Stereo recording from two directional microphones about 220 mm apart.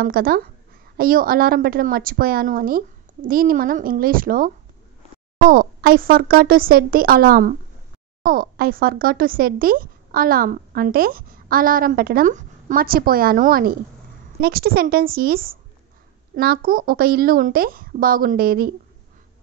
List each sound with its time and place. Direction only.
0.0 s a woman's voice: 40° right (ahead or behind)